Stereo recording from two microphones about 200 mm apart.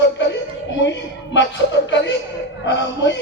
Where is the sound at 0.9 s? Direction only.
65° left (ahead or behind).